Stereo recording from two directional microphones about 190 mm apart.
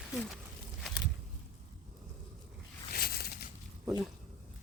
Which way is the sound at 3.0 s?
55° left (ahead or behind).